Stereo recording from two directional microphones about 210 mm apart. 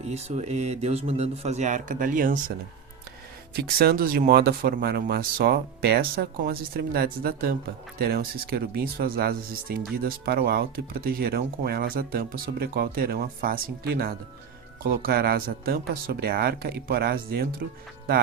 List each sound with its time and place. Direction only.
0.0 s speech: 30° right (ahead or behind)
3.5 s speech: 50° right (ahead or behind)